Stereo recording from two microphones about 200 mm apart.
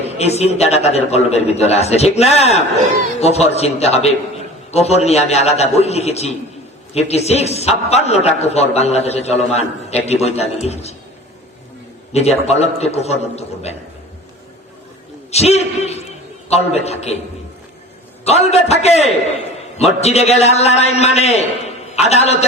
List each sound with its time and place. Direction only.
0.0 s a man's voice: 30° left (ahead or behind)
12.1 s a man's voice: 30° left (ahead or behind)
15.3 s a man's voice: 30° left (ahead or behind)
18.3 s a man's voice: 30° left (ahead or behind)